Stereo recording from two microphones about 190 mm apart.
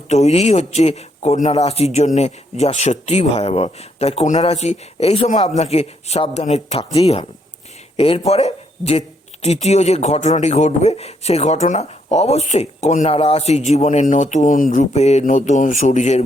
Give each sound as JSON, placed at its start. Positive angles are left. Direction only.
{"t": 0.1, "sound": "speech", "side_deg": 35}